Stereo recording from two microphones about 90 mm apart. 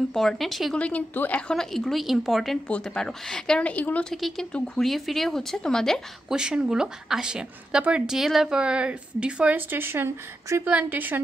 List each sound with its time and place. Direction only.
0.1 s speech: 5° left (ahead or behind)
0.7 s speech: 15° left (ahead or behind)
1.5 s speech: 5° left (ahead or behind)
4.1 s speech: 5° left (ahead or behind)
6.2 s a woman's voice: 10° right (ahead or behind)